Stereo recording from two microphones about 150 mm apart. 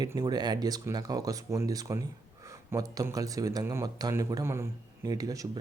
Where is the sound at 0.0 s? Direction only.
25° right (ahead or behind).